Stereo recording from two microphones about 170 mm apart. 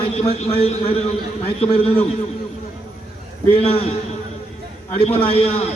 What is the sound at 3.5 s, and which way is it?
Speech, 35° left (ahead or behind).